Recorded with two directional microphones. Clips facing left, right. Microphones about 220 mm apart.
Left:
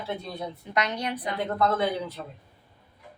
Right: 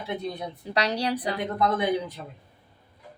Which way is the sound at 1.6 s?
15° right (ahead or behind).